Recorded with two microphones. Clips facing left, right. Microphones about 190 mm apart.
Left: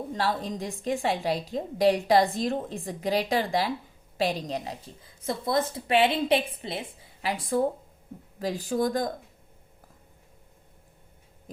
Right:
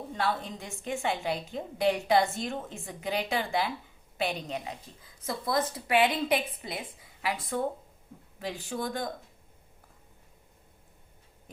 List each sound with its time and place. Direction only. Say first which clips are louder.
0.1 s a woman's voice: left 2 dB; 35° left (ahead or behind)